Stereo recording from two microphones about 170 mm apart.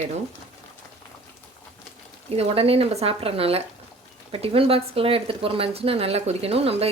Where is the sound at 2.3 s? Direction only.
35° right (ahead or behind).